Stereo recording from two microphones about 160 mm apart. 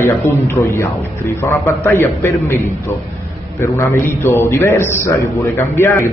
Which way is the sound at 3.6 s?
15° left (ahead or behind).